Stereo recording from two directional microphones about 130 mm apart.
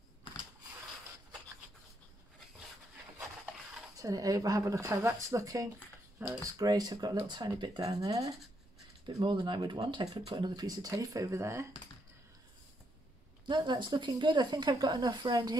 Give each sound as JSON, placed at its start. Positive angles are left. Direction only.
{"t": 3.9, "sound": "speech", "side_deg": -25}
{"t": 9.0, "sound": "speech", "side_deg": -40}
{"t": 13.5, "sound": "speech", "side_deg": -35}